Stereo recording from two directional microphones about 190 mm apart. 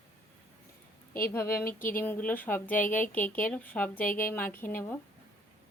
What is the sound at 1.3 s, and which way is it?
A woman's voice, 15° left (ahead or behind).